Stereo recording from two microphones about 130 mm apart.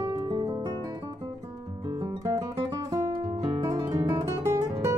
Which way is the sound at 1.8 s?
30° right (ahead or behind).